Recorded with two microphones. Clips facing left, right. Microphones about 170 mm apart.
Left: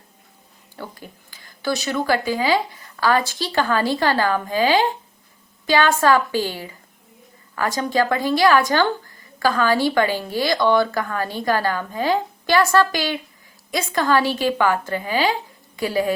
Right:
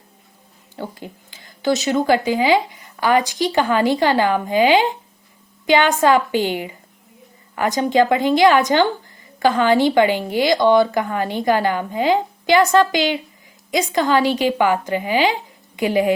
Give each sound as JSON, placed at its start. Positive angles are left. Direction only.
{"t": 0.8, "sound": "a woman's voice", "side_deg": -20}